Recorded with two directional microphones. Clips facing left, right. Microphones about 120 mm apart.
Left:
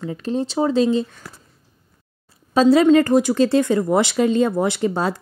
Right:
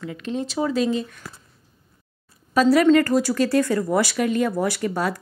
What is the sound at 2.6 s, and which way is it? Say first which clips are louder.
Speech: left 3 dB; 25° left (ahead or behind).